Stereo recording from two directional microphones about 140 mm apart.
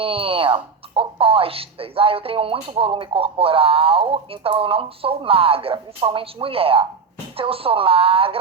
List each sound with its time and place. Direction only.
0.0 s speech: 40° right (ahead or behind)